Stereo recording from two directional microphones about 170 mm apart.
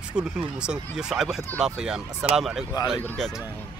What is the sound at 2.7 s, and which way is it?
Speech, 25° left (ahead or behind).